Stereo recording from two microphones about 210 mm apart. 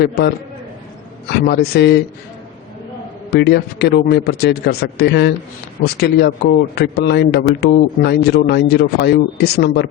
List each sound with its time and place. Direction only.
0.0 s a man's voice: 45° left (ahead or behind)
3.2 s a man's voice: 50° left (ahead or behind)